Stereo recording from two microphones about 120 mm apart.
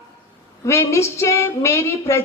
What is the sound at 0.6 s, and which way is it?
A woman's voice, 25° left (ahead or behind).